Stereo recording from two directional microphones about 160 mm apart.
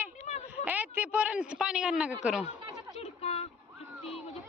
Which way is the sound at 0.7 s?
10° right (ahead or behind).